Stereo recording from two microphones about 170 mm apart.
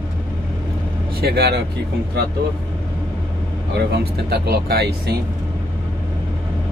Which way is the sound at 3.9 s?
65° right (ahead or behind).